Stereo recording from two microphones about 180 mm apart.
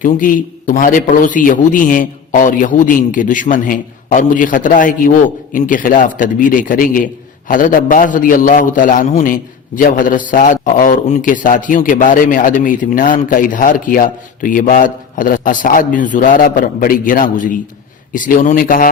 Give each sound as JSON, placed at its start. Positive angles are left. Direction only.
{"t": 0.0, "sound": "a man's voice", "side_deg": 50}